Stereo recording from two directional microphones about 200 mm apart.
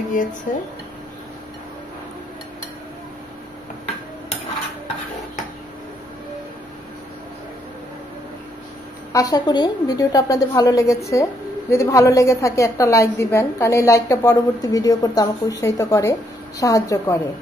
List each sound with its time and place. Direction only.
0.5 s speech: 40° left (ahead or behind)
9.1 s a woman's voice: 15° left (ahead or behind)